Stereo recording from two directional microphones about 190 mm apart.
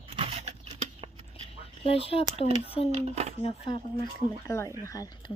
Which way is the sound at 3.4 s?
30° left (ahead or behind).